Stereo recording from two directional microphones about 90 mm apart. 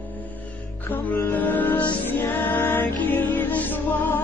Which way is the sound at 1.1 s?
20° left (ahead or behind).